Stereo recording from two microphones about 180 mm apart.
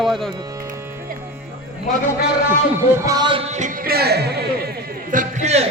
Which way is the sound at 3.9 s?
60° right (ahead or behind).